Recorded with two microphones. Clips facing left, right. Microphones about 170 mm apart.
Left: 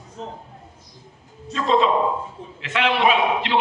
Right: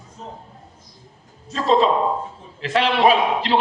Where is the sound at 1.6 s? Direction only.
35° right (ahead or behind).